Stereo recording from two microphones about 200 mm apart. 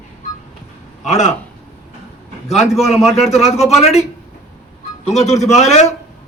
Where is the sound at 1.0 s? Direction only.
35° left (ahead or behind).